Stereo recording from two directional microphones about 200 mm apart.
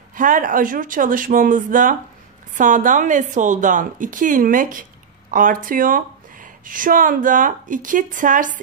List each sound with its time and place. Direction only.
0.1 s a woman's voice: 40° right (ahead or behind)